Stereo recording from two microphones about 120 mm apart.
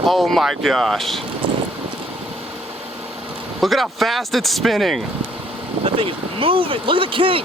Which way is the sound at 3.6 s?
Centre (ahead or behind).